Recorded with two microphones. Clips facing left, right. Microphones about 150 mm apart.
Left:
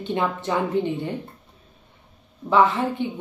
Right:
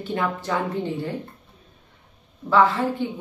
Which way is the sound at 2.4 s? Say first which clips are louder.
Even; 20° left (ahead or behind).